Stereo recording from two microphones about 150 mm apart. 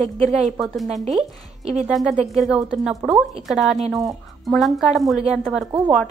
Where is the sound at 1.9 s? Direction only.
Centre (ahead or behind).